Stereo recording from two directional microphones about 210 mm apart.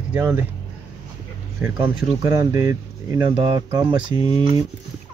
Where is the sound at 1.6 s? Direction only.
15° right (ahead or behind).